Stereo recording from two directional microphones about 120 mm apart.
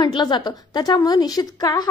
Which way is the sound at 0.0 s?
35° left (ahead or behind).